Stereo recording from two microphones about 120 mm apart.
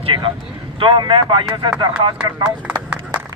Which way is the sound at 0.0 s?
45° right (ahead or behind).